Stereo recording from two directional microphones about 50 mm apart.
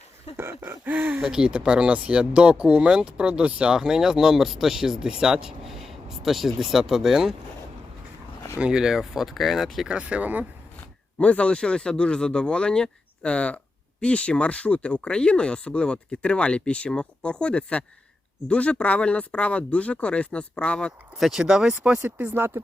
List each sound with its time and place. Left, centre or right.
0.3 s a sound: right
0.9 s speech: right
1.2 s speech: centre
3.8 s speech: centre
8.5 s speech: centre
9.9 s speech: right
11.2 s speech: left
21.2 s speech: centre
22.4 s speech: right